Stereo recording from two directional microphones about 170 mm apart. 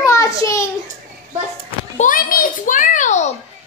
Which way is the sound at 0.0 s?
20° left (ahead or behind).